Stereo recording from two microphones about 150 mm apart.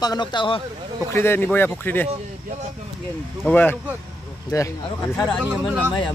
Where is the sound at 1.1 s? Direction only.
15° left (ahead or behind).